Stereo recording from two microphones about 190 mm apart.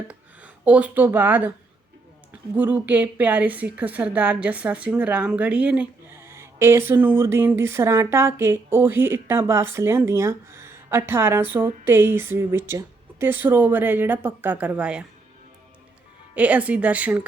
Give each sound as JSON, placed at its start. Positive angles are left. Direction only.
{"t": 0.1, "sound": "speech", "side_deg": -5}
{"t": 2.6, "sound": "a woman's voice", "side_deg": -10}
{"t": 16.3, "sound": "a woman's voice", "side_deg": -5}